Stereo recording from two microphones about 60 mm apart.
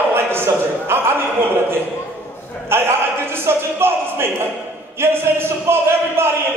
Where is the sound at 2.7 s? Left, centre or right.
Right.